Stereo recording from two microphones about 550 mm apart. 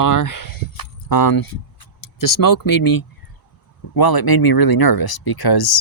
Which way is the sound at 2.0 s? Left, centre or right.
Left.